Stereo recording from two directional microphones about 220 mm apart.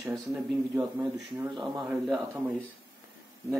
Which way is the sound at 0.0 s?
5° right (ahead or behind).